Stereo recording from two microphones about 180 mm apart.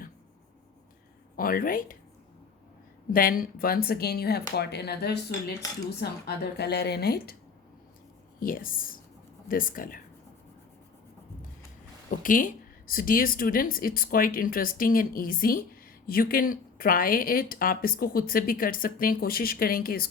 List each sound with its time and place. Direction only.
1.4 s speech: 50° left (ahead or behind)
3.1 s speech: 50° left (ahead or behind)
8.4 s speech: 50° left (ahead or behind)
12.1 s speech: 50° left (ahead or behind)